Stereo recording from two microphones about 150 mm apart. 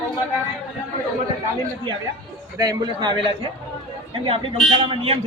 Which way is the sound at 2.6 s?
25° right (ahead or behind).